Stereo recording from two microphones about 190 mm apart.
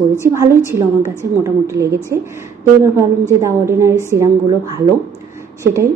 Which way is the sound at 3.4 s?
15° right (ahead or behind).